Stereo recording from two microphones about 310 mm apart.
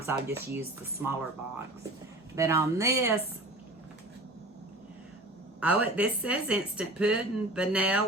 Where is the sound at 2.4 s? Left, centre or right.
Centre.